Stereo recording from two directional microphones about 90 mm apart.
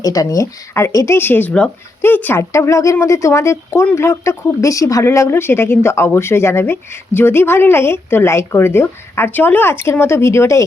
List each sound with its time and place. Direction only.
0.0 s speech: 40° left (ahead or behind); by 2.4 s 20° left (ahead or behind)
2.4 s speech: 35° left (ahead or behind)